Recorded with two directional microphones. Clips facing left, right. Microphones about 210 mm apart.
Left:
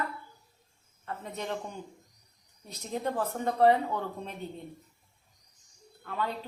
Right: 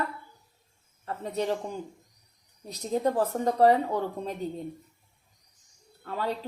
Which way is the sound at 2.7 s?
40° right (ahead or behind).